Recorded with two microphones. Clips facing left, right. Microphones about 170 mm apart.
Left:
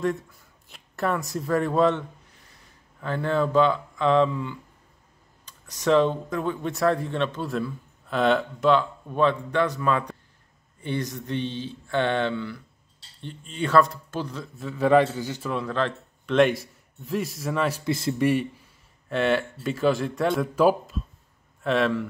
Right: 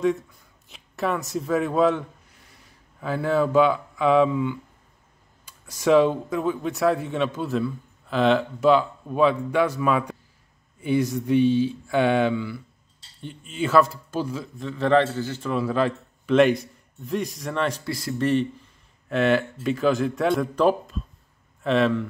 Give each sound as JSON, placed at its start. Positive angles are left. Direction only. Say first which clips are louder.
{"t": 0.7, "sound": "speech", "louder": "right 1 dB", "side_deg": 0}
{"t": 14.6, "sound": "a man's voice", "louder": "left 1 dB", "side_deg": 10}
{"t": 15.5, "sound": "a man's voice", "louder": "right 4 dB", "side_deg": -5}
{"t": 17.8, "sound": "speech", "louder": "left 4 dB", "side_deg": 25}
{"t": 18.1, "sound": "a man's voice", "louder": "right 2 dB", "side_deg": 10}
{"t": 19.0, "sound": "speech", "louder": "right 2 dB", "side_deg": 0}